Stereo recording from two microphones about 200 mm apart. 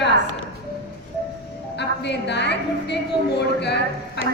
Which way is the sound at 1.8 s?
60° left (ahead or behind).